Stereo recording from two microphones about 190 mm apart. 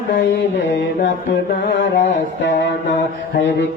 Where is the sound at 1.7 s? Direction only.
70° left (ahead or behind).